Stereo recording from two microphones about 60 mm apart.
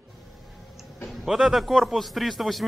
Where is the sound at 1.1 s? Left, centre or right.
Centre.